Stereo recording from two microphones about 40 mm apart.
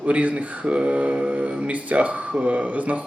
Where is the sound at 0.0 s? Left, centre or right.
Right.